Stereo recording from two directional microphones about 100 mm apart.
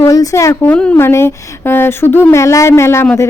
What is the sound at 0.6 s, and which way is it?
Speech, 15° left (ahead or behind).